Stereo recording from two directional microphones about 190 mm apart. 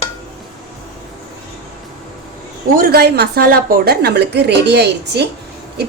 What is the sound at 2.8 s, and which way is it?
A woman's voice, 55° right (ahead or behind).